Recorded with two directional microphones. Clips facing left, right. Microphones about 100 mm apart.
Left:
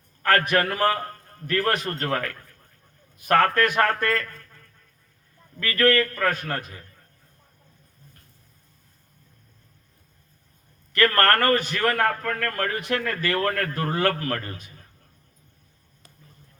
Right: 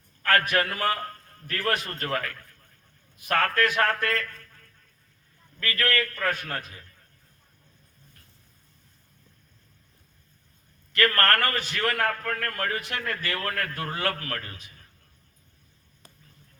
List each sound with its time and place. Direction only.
0.3 s a man's voice: 45° left (ahead or behind)
5.6 s a man's voice: 40° left (ahead or behind)
10.9 s a man's voice: 45° left (ahead or behind)